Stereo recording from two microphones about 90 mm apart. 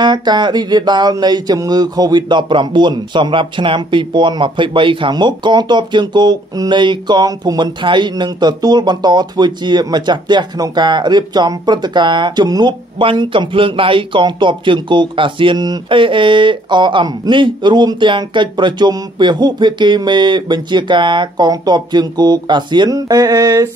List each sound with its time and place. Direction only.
0.0 s speech: 55° right (ahead or behind)
13.0 s speech: 75° right (ahead or behind)
15.6 s speech: 50° right (ahead or behind)
16.0 s speech: 70° right (ahead or behind)
22.9 s mantra: 45° right (ahead or behind)